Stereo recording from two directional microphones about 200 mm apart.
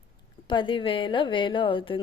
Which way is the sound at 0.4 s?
25° left (ahead or behind).